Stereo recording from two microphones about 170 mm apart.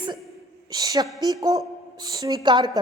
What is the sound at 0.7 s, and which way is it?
A woman's voice, 20° right (ahead or behind).